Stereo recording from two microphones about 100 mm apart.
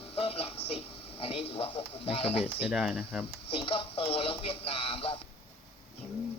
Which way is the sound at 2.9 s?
10° left (ahead or behind).